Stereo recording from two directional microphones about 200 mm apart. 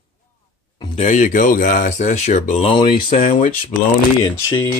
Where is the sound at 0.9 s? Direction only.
35° left (ahead or behind).